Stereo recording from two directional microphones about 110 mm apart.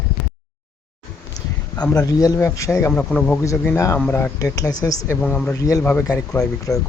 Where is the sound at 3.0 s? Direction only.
15° left (ahead or behind).